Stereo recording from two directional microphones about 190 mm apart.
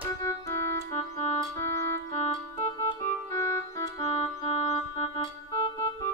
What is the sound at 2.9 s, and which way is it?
Organ, 15° left (ahead or behind).